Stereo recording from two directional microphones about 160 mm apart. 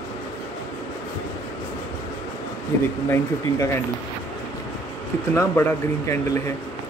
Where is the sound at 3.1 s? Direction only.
15° left (ahead or behind).